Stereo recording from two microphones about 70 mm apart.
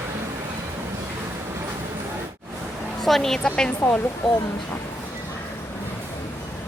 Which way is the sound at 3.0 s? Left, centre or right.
Centre.